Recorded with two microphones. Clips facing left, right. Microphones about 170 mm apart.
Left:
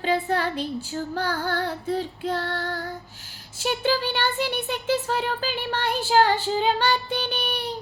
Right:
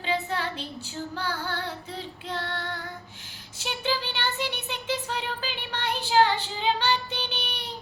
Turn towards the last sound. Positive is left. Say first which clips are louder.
# left 6 dB
turn(degrees=45)  # may be behind; listen again after turning